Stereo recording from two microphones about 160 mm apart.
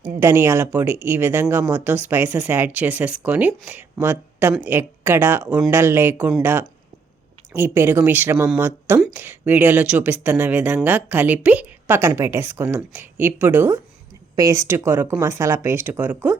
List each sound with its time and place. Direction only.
0.2 s a woman's voice: 15° right (ahead or behind)